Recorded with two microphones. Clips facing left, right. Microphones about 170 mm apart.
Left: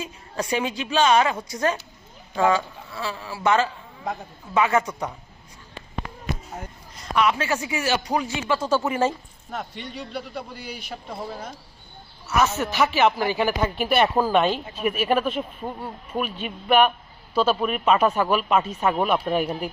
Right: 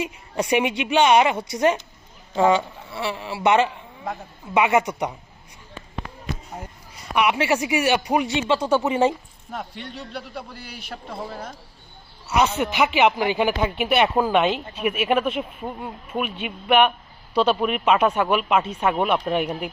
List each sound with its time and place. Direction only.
0.0 s a woman's voice: 20° right (ahead or behind)
7.0 s a woman's voice: 15° right (ahead or behind)
9.5 s speech: centre (ahead or behind)
12.6 s speech: 15° right (ahead or behind)
13.6 s speech: 5° right (ahead or behind)
14.8 s speech: 10° right (ahead or behind)
18.4 s speech: 10° right (ahead or behind)
18.9 s speech: 5° left (ahead or behind)